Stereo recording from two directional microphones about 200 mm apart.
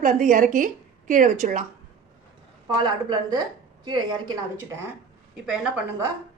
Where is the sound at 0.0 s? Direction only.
40° right (ahead or behind).